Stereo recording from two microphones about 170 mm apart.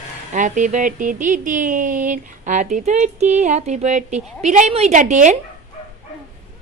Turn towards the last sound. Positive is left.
turn(degrees=-45)  # may be behind; listen again after turning